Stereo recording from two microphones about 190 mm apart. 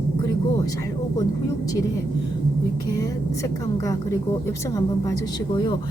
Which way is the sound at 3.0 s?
20° left (ahead or behind).